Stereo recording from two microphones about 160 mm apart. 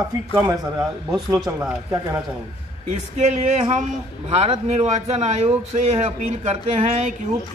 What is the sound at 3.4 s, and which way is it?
Speech, 45° right (ahead or behind).